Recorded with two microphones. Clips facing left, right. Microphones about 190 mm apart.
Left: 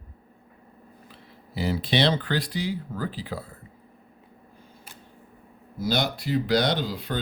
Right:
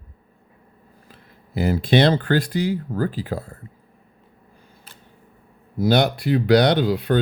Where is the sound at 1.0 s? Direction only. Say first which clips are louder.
Left 1 dB; 50° right (ahead or behind).